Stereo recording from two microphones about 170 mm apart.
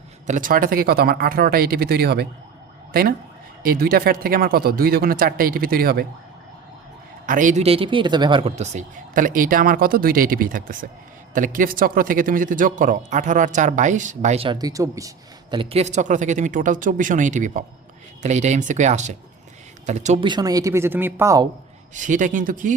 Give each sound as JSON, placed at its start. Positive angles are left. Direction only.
{"t": 0.3, "sound": "speech", "side_deg": -50}
{"t": 7.3, "sound": "a man's voice", "side_deg": -50}
{"t": 15.5, "sound": "a man's voice", "side_deg": -40}
{"t": 20.2, "sound": "speech", "side_deg": -25}
{"t": 21.9, "sound": "a man's voice", "side_deg": -45}